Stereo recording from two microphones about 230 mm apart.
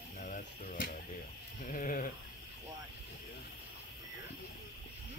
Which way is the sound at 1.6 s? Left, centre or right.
Left.